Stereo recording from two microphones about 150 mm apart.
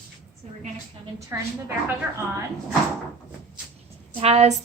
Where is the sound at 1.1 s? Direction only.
20° right (ahead or behind).